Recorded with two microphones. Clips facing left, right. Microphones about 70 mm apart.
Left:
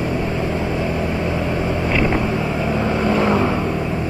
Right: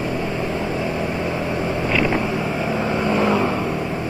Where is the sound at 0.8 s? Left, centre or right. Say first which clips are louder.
Left 2 dB; centre.